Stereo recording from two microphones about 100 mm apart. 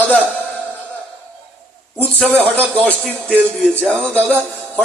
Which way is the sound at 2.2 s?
10° left (ahead or behind).